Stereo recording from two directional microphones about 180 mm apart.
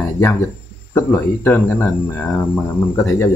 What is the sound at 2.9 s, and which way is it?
Speech, 15° left (ahead or behind).